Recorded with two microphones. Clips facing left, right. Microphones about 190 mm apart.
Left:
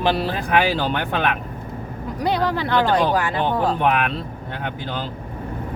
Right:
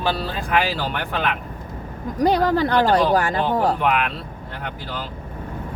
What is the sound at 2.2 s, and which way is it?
Speech, 45° right (ahead or behind).